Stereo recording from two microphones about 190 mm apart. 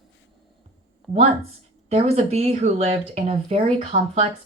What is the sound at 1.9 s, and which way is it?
Speech, 30° right (ahead or behind).